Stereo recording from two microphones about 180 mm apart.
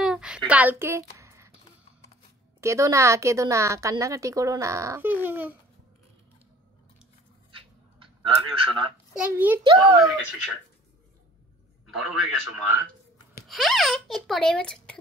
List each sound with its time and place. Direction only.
0.0 s a sound: 5° right (ahead or behind)
2.6 s a woman's voice: 15° right (ahead or behind)
7.5 s a sound: 30° right (ahead or behind)
9.1 s a woman's voice: 10° right (ahead or behind)
9.6 s a child's voice: 25° right (ahead or behind)
11.9 s a child's voice: 5° right (ahead or behind)